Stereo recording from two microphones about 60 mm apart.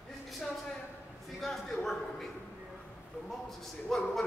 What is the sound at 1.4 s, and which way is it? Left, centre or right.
Speech, centre.